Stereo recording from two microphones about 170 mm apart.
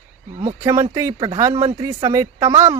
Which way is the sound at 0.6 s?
20° right (ahead or behind).